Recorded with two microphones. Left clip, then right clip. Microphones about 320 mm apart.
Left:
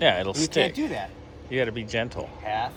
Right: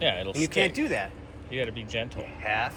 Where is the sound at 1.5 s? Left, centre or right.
Left.